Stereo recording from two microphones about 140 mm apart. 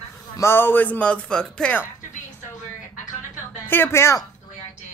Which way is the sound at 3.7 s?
15° left (ahead or behind).